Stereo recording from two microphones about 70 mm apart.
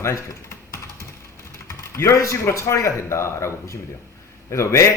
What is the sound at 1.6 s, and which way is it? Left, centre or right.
Speech, left.